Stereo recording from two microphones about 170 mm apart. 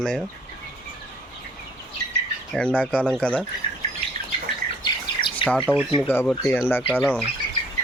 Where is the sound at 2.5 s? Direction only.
5° left (ahead or behind).